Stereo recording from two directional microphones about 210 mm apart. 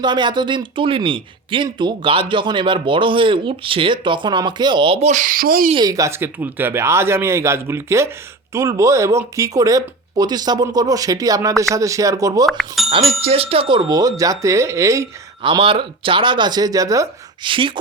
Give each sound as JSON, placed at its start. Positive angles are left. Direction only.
{"t": 0.0, "sound": "speech", "side_deg": -20}
{"t": 5.7, "sound": "speech", "side_deg": -15}
{"t": 12.5, "sound": "speech", "side_deg": 0}
{"t": 12.9, "sound": "speech", "side_deg": -25}
{"t": 15.4, "sound": "speech", "side_deg": -25}